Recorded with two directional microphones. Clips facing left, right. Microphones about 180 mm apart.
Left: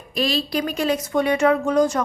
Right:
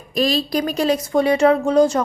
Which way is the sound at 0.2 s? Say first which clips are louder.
Right 3 dB; 40° right (ahead or behind).